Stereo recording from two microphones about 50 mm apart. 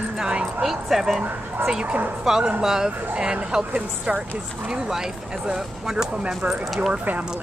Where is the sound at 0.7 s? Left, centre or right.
Centre.